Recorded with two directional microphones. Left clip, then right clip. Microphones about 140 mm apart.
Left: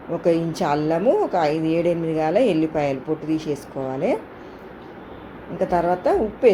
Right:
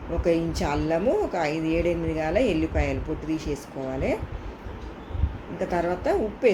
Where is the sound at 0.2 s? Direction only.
20° left (ahead or behind).